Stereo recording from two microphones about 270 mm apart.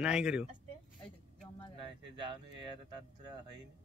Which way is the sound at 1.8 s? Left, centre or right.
Centre.